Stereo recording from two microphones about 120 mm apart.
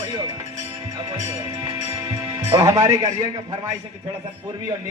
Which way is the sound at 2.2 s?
30° right (ahead or behind).